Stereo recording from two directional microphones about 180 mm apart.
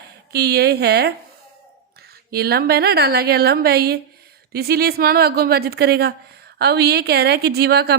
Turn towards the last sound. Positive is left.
turn(degrees=-65)  # may be behind; listen again after turning